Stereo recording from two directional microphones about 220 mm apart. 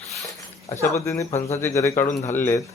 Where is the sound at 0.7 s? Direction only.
30° left (ahead or behind).